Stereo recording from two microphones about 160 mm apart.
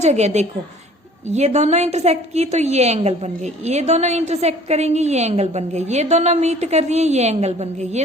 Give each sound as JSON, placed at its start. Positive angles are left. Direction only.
{"t": 0.0, "sound": "a woman's voice", "side_deg": -45}